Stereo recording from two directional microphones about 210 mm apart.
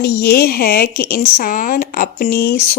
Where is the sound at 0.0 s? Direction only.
50° left (ahead or behind).